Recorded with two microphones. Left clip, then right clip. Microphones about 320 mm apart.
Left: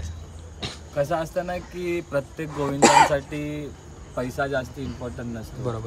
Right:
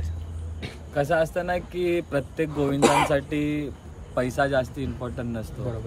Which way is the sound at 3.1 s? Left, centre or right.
Centre.